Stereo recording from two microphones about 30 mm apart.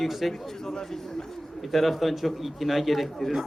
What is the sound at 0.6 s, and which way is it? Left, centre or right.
Speech, centre.